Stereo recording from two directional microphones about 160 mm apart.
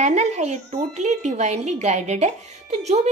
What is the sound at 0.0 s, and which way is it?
A woman's voice, 45° right (ahead or behind).